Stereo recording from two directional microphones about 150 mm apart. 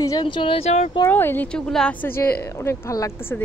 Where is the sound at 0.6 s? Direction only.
50° left (ahead or behind).